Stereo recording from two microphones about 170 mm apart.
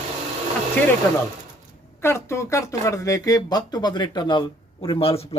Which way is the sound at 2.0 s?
15° left (ahead or behind).